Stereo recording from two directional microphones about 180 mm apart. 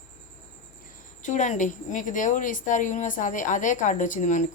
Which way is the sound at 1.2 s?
45° left (ahead or behind).